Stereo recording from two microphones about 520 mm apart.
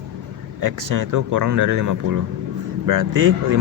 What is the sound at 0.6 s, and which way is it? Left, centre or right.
Speech, right.